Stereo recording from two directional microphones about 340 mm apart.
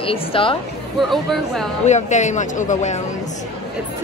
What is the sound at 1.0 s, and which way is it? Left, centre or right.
Speech, centre.